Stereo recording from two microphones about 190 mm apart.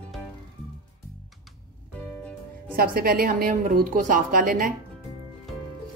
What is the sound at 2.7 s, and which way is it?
A woman's voice, 50° right (ahead or behind).